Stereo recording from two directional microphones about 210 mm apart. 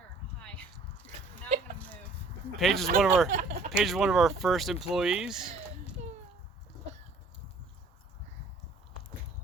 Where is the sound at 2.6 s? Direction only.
Centre (ahead or behind).